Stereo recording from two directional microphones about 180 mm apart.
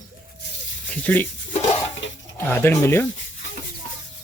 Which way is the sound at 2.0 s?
90° left.